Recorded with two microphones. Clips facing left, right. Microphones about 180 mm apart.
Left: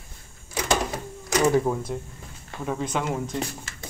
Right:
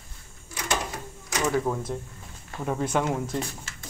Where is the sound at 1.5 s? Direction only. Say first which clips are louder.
Left 3 dB; 10° left (ahead or behind).